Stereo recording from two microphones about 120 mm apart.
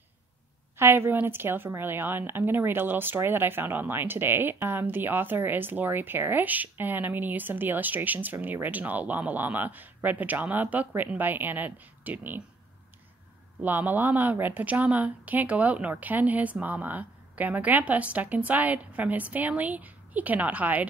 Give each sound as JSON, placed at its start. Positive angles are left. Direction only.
{"t": 0.7, "sound": "a woman's voice", "side_deg": -20}
{"t": 13.6, "sound": "a woman's voice", "side_deg": -15}